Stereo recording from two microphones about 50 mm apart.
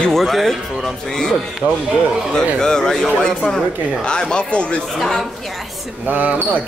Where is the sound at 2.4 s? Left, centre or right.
Centre.